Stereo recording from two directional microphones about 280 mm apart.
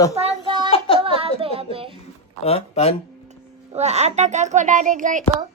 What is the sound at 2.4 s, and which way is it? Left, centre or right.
Speech, left.